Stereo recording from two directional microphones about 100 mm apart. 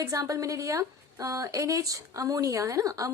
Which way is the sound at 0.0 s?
35° right (ahead or behind).